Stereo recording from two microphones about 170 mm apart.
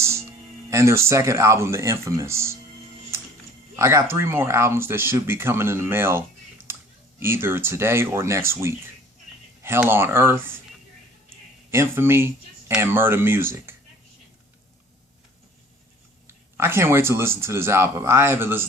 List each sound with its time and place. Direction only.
0.0 s speech: 15° right (ahead or behind)
3.8 s speech: 15° right (ahead or behind)
11.7 s speech: 15° right (ahead or behind)
16.2 s speech: 15° right (ahead or behind)